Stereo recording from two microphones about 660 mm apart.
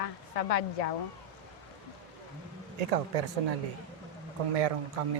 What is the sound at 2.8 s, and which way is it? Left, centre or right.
Speech, right.